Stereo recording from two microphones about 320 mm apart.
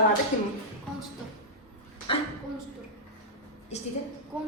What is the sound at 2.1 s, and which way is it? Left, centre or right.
Speech, centre.